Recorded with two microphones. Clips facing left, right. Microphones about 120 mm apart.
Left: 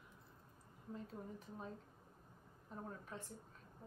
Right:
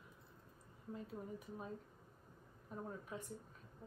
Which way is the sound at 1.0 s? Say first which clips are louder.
Right 2 dB; 10° right (ahead or behind).